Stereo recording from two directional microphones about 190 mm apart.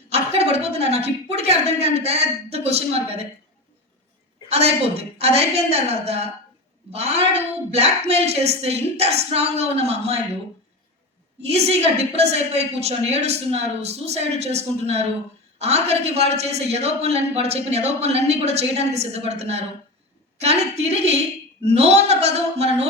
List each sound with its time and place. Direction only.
0.1 s a woman's voice: 30° right (ahead or behind)
4.5 s a woman's voice: 35° right (ahead or behind)
11.4 s a woman's voice: 35° right (ahead or behind)
21.6 s a woman's voice: 35° right (ahead or behind)